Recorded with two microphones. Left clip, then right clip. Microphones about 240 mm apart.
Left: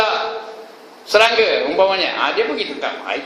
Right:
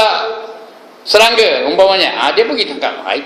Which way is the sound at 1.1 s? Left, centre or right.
Right.